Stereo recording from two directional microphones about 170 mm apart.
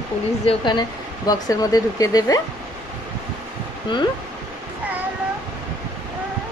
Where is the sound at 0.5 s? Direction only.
25° left (ahead or behind).